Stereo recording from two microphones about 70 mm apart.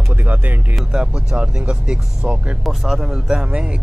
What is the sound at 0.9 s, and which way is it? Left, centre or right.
Speech, centre.